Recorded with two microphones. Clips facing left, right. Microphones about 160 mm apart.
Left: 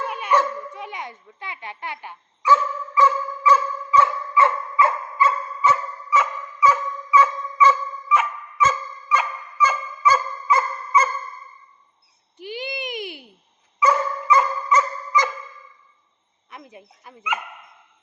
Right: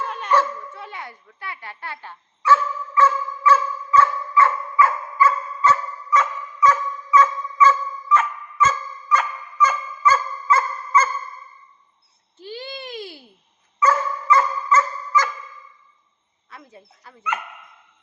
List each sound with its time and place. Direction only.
0.0 s dog: 10° left (ahead or behind)
6.1 s dog: 10° left (ahead or behind)
12.4 s a sound: 15° left (ahead or behind)
13.7 s dog: 15° left (ahead or behind)
16.5 s speech: 20° left (ahead or behind)